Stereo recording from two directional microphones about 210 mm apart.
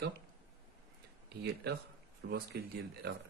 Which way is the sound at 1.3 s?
50° right (ahead or behind).